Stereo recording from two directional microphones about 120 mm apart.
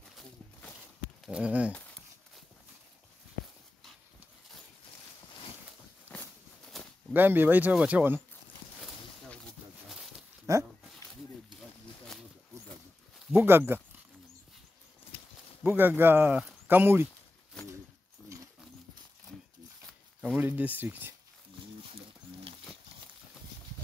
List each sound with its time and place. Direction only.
1.2 s speech: 10° right (ahead or behind)
6.1 s walk: 15° left (ahead or behind)
6.7 s a sound: centre (ahead or behind)
7.2 s speech: 15° right (ahead or behind)
9.8 s pig: 5° right (ahead or behind)
10.4 s dog: 25° right (ahead or behind)
13.3 s speech: 20° right (ahead or behind)
15.6 s speech: 15° right (ahead or behind)
19.9 s zipper: 5° left (ahead or behind)
20.3 s speech: 15° right (ahead or behind)